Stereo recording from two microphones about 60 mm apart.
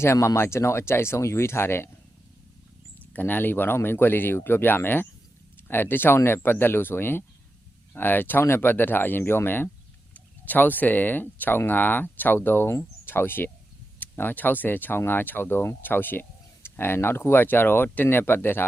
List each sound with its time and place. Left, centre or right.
0.0 s speech: left
3.1 s speech: left